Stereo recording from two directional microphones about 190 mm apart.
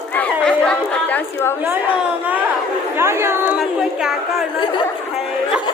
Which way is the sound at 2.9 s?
15° right (ahead or behind).